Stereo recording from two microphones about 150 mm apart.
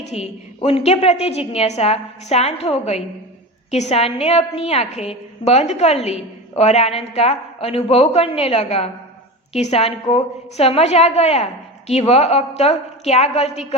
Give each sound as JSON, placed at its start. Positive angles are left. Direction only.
{"t": 0.0, "sound": "a woman's voice", "side_deg": 45}